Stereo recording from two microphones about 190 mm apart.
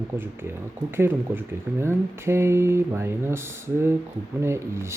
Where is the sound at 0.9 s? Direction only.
10° right (ahead or behind).